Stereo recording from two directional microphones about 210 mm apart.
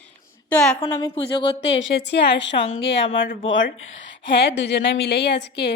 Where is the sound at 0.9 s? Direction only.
20° left (ahead or behind).